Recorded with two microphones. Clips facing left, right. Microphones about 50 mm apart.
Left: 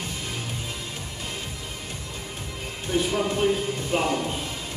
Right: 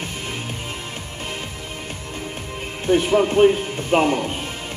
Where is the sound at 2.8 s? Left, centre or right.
Right.